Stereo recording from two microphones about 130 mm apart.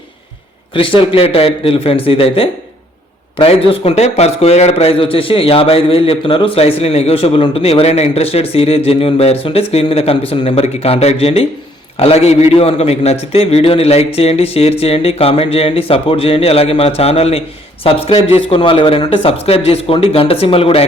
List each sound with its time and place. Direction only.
0.7 s a man's voice: 40° left (ahead or behind)